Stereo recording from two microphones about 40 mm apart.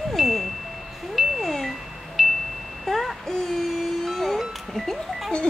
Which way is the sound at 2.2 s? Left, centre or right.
Centre.